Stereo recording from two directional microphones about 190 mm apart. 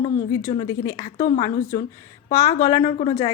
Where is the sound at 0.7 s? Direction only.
15° left (ahead or behind).